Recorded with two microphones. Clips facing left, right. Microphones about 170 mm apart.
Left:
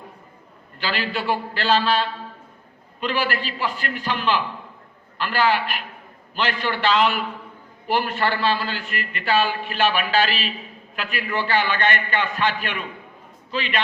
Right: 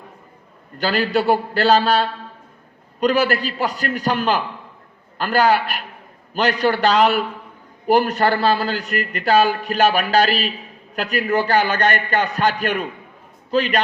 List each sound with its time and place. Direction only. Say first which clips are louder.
0.8 s a man's voice: right 7 dB; 45° right (ahead or behind)